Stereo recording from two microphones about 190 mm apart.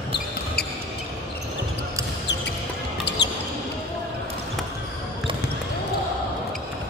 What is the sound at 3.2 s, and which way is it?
Basketball bounce, 65° left (ahead or behind).